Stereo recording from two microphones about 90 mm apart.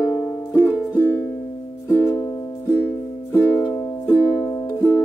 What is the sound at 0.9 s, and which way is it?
Music, 20° left (ahead or behind).